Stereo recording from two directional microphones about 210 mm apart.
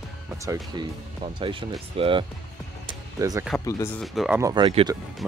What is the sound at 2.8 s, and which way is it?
Music, 15° right (ahead or behind).